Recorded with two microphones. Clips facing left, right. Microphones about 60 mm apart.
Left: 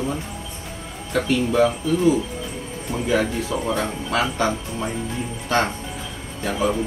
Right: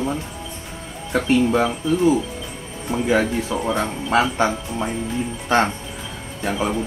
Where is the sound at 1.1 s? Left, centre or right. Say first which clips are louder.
Right 1 dB; right.